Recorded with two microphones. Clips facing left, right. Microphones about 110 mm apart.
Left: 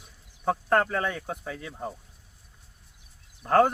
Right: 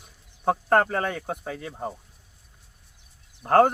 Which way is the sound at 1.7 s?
25° right (ahead or behind).